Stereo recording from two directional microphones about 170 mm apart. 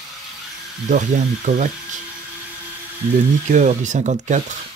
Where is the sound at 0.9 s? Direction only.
45° right (ahead or behind).